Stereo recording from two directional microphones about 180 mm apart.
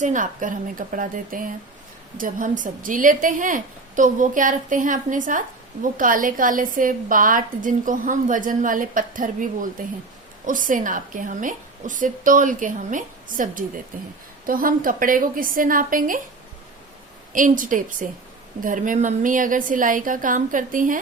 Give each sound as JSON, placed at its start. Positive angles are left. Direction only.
{"t": 0.0, "sound": "a woman's voice", "side_deg": -45}
{"t": 17.3, "sound": "a woman's voice", "side_deg": -45}